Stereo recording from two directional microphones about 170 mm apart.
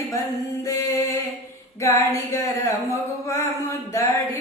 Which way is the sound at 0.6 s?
20° left (ahead or behind).